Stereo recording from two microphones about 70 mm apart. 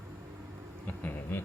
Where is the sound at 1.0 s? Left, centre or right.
Left.